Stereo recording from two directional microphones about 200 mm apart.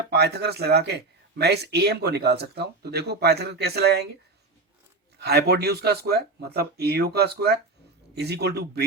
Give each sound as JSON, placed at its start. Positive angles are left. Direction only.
{"t": 0.1, "sound": "speech", "side_deg": -55}
{"t": 5.2, "sound": "speech", "side_deg": -55}